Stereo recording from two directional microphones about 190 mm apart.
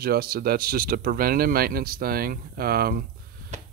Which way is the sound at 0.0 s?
55° right (ahead or behind).